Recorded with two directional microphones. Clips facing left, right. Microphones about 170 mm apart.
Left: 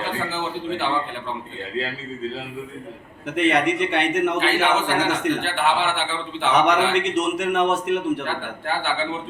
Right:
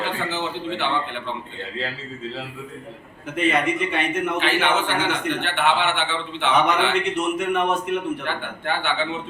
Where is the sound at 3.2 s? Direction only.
75° left (ahead or behind).